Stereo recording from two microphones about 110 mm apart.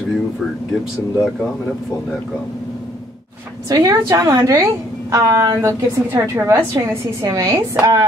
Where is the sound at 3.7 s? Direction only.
35° right (ahead or behind).